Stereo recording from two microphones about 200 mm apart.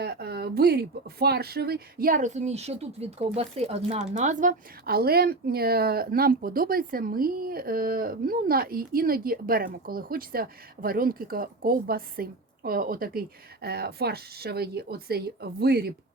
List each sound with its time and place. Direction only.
0.0 s speech: 50° right (ahead or behind)